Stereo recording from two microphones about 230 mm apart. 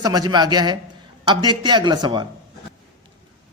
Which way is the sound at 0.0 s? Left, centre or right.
Centre.